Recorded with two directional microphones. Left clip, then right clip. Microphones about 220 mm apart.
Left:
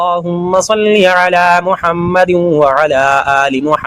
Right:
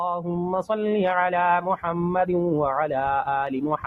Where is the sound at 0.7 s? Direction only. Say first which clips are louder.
Left 14 dB; 15° left (ahead or behind).